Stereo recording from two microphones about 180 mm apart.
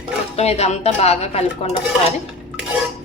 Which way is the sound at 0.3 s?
35° left (ahead or behind).